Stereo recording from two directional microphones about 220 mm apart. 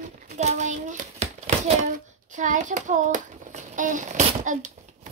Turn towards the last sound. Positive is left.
turn(degrees=-35)  # may be behind; listen again after turning